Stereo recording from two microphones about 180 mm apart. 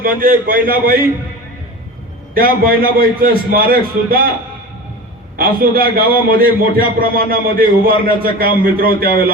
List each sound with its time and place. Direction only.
0.2 s a man's voice: 55° right (ahead or behind)
2.3 s a man's voice: 55° right (ahead or behind)
5.4 s a man's voice: 55° right (ahead or behind)